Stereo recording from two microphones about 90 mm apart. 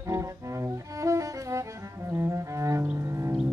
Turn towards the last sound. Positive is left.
turn(degrees=-35)  # may be behind; listen again after turning